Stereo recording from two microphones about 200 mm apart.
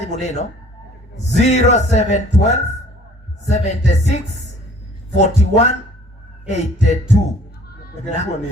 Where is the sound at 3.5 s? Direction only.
35° left (ahead or behind).